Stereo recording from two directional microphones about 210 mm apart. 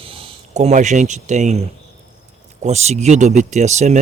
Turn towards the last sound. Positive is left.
turn(degrees=-30)  # may be behind; listen again after turning